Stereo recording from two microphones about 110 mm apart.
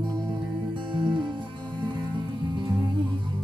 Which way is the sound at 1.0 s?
45° right (ahead or behind).